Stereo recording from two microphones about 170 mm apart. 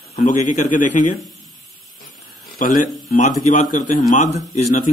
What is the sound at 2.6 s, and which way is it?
A man's voice, 50° left (ahead or behind).